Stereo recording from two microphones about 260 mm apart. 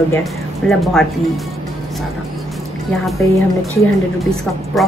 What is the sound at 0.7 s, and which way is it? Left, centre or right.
Speech, centre.